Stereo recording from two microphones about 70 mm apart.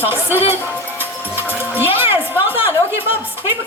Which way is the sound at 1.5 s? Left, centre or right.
Right.